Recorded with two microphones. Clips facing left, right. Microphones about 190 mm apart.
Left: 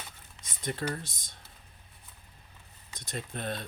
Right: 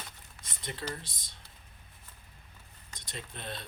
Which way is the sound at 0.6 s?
45° left (ahead or behind).